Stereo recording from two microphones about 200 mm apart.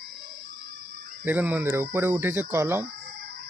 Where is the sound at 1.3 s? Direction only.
10° right (ahead or behind).